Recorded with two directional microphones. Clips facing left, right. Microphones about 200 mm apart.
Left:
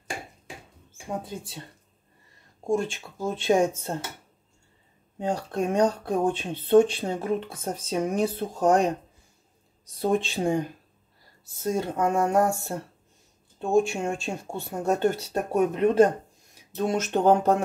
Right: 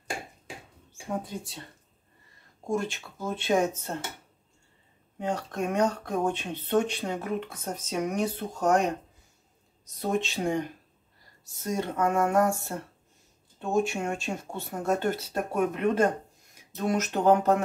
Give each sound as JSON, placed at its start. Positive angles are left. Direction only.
{"t": 2.7, "sound": "speech", "side_deg": 25}
{"t": 5.2, "sound": "speech", "side_deg": 30}
{"t": 10.2, "sound": "speech", "side_deg": 30}
{"t": 11.6, "sound": "speech", "side_deg": 30}